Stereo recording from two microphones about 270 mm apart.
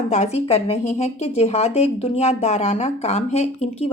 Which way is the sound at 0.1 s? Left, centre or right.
Left.